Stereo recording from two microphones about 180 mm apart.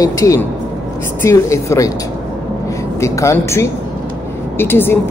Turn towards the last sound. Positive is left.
turn(degrees=10)  # may be behind; listen again after turning